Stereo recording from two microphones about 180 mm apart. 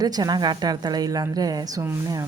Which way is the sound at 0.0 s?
20° right (ahead or behind).